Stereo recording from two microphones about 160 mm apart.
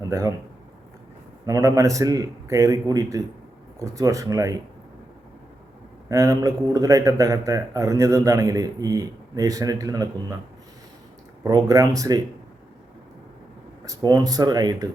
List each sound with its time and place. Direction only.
0.1 s a man's voice: 20° right (ahead or behind)
1.5 s a man's voice: 20° right (ahead or behind)
6.1 s a man's voice: 20° right (ahead or behind)
11.4 s a man's voice: 20° right (ahead or behind)
13.8 s a man's voice: 25° right (ahead or behind)